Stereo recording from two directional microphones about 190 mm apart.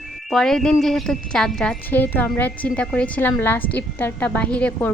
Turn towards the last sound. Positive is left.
turn(degrees=5)  # may be behind; listen again after turning